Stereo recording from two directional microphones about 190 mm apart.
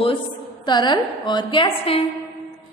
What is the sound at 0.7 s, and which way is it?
A woman's voice, 20° left (ahead or behind).